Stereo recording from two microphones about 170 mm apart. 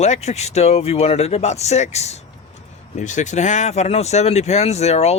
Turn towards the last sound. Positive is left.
turn(degrees=40)  # may be behind; listen again after turning